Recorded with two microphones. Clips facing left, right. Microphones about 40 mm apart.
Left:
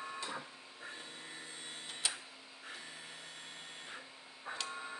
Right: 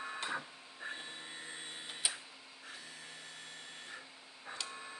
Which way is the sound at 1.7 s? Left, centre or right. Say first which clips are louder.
Right 1 dB; centre.